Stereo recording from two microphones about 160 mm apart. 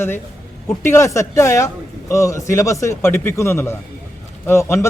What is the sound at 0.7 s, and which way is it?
Speech, 15° left (ahead or behind).